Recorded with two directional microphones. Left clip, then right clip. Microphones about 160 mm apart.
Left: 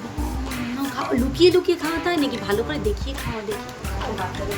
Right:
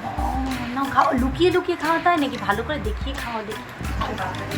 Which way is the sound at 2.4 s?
15° left (ahead or behind).